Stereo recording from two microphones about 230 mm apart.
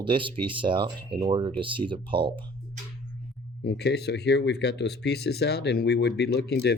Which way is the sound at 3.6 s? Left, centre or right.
Left.